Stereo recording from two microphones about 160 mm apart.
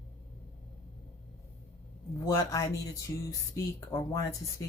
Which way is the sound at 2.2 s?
20° left (ahead or behind).